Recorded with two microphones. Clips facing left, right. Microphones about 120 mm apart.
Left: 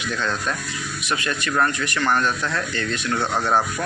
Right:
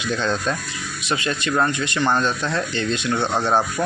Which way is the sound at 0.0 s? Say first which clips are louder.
Right 3 dB; 25° right (ahead or behind).